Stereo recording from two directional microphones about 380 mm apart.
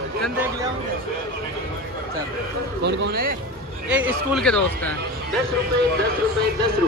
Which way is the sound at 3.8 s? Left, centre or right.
Centre.